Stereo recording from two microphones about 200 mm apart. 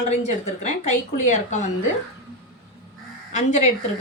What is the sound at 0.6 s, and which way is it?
Speech, 35° left (ahead or behind).